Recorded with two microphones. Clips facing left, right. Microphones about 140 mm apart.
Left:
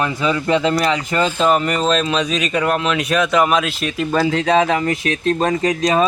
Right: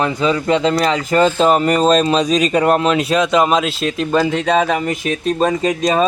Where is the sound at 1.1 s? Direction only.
35° right (ahead or behind).